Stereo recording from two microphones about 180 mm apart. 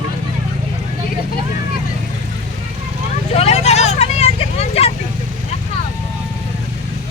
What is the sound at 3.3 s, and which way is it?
Vehicle, 35° left (ahead or behind).